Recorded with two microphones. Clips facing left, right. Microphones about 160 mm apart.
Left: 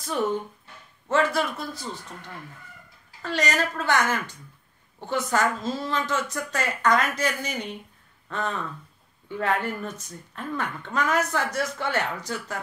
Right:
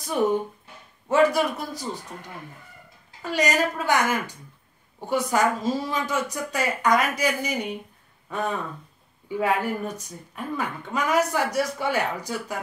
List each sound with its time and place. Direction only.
0.0 s a woman's voice: 15° right (ahead or behind)